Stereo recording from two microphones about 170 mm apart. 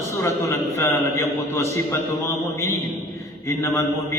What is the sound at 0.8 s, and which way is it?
Mantra, 15° left (ahead or behind).